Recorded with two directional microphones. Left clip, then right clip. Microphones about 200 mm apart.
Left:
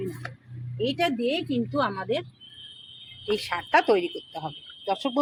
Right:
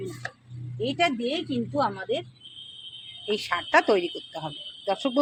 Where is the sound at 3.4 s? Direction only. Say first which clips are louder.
Right 1 dB; centre (ahead or behind).